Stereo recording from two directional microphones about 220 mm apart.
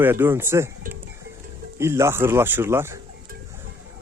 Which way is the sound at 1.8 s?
10° right (ahead or behind).